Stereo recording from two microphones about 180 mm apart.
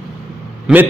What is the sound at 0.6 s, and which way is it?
Speech, 10° right (ahead or behind).